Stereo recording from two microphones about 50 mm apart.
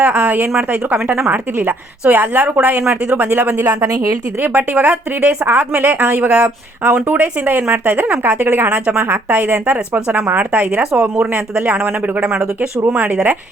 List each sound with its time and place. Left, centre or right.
0.0 s a woman's voice: right
3.5 s speech: right
4.4 s a woman's voice: right
6.1 s a woman's voice: right
8.7 s a woman's voice: right
9.1 s a woman's voice: right